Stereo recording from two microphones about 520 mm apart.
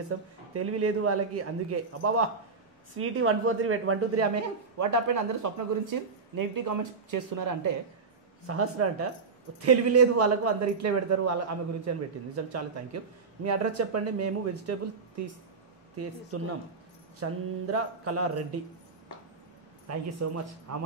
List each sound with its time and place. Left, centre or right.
0.1 s a man's voice: right
8.5 s a man's voice: right
16.3 s a man's voice: right
19.9 s a man's voice: right